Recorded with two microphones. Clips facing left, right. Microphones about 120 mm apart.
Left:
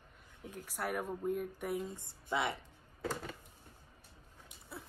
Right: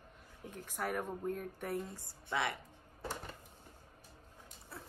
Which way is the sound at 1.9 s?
20° left (ahead or behind).